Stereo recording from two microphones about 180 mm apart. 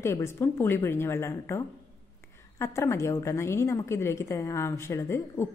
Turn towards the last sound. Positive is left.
turn(degrees=15)  # may be behind; listen again after turning